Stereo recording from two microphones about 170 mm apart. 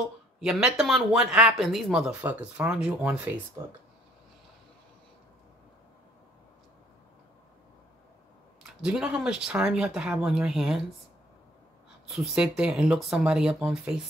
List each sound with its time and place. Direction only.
0.4 s speech: 5° right (ahead or behind)
3.6 s speech: 20° right (ahead or behind)
8.8 s speech: 5° right (ahead or behind)
12.1 s speech: 5° right (ahead or behind)